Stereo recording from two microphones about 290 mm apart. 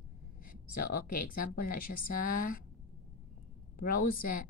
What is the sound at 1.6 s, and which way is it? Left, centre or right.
Speech, left.